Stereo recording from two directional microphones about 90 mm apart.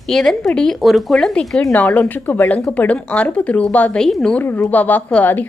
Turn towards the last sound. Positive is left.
turn(degrees=20)  # may be behind; listen again after turning